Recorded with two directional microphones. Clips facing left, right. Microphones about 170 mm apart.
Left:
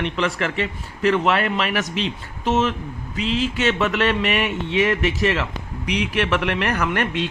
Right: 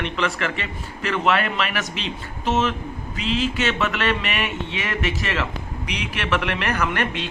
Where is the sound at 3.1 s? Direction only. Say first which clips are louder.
Left 1 dB; 25° left (ahead or behind).